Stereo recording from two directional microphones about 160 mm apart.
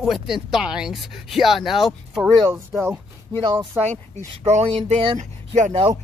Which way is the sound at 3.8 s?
45° right (ahead or behind).